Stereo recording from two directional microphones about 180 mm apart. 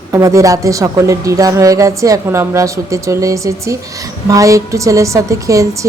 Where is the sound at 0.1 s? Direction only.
15° right (ahead or behind).